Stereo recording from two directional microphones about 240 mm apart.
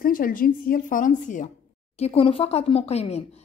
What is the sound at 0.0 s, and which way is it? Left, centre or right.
A woman's voice, left.